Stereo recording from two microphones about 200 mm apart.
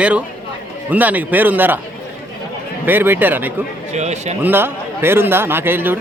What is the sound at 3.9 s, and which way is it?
Speech, 35° right (ahead or behind).